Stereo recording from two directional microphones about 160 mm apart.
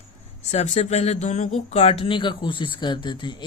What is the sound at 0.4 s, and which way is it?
Speech, 45° left (ahead or behind).